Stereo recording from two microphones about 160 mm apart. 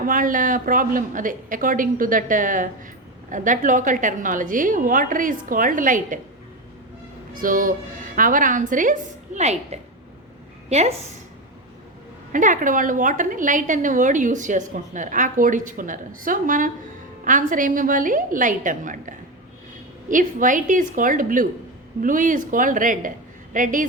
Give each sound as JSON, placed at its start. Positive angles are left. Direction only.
{"t": 0.0, "sound": "a woman's voice", "side_deg": -55}
{"t": 7.3, "sound": "a woman's voice", "side_deg": -60}
{"t": 12.3, "sound": "a woman's voice", "side_deg": -55}